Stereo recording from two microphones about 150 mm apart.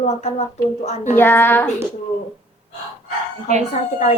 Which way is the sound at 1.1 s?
15° left (ahead or behind).